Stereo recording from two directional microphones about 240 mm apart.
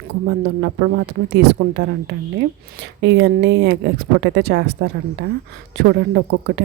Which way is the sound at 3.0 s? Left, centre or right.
Right.